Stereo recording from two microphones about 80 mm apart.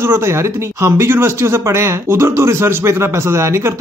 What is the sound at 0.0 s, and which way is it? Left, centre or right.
Speech, right.